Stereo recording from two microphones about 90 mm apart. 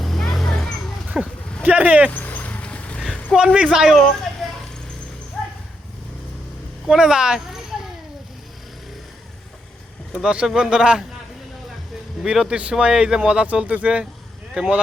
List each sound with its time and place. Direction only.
0.0 s vehicle: 5° left (ahead or behind)
1.6 s speech: 15° right (ahead or behind)
2.0 s a sound: 20° left (ahead or behind)
3.3 s speech: 10° right (ahead or behind)
6.8 s speech: 10° right (ahead or behind)
10.2 s speech: 10° right (ahead or behind)
12.2 s speech: 5° right (ahead or behind)